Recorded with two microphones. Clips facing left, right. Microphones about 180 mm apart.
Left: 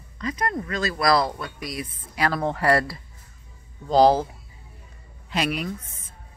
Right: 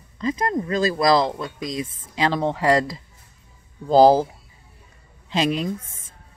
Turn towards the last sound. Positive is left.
turn(degrees=-25)  # may be behind; listen again after turning